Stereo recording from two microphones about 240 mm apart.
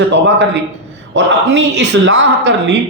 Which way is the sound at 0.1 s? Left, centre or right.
Right.